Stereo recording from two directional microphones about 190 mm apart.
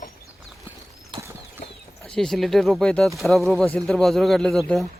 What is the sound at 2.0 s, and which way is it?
Speech, 5° left (ahead or behind).